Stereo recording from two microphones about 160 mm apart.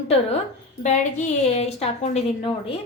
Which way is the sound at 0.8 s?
50° left (ahead or behind).